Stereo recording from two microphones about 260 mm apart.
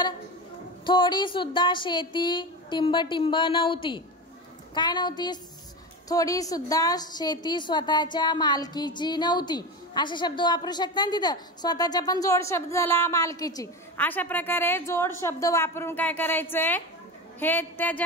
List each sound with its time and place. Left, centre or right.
0.8 s a woman's voice: centre